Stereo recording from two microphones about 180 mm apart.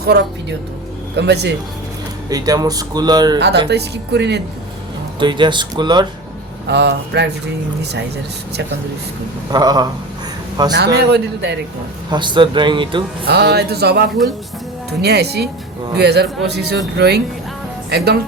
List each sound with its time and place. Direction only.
0.1 s a man's voice: 65° right (ahead or behind)
2.3 s speech: 20° right (ahead or behind)
3.3 s a man's voice: 70° right (ahead or behind)
5.2 s speech: 25° right (ahead or behind)
6.7 s a man's voice: 70° right (ahead or behind)
9.5 s speech: 20° right (ahead or behind)
10.8 s a man's voice: 70° right (ahead or behind)
12.1 s speech: 25° right (ahead or behind)
13.2 s speech: 65° right (ahead or behind)